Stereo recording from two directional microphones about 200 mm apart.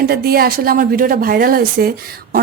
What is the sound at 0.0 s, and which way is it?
A woman's voice, 50° right (ahead or behind).